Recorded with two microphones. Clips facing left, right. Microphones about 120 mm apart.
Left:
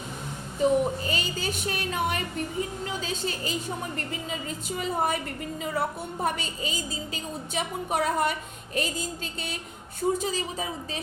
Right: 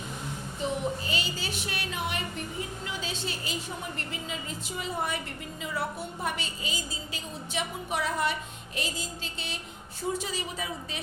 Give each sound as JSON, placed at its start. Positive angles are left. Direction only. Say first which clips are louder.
{"t": 0.6, "sound": "a woman's voice", "louder": "left 8 dB", "side_deg": 45}